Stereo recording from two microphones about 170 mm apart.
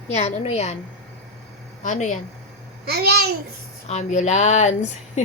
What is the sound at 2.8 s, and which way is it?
Speech, 70° right (ahead or behind).